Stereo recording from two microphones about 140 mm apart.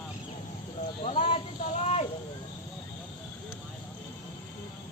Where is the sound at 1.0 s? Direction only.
45° left (ahead or behind).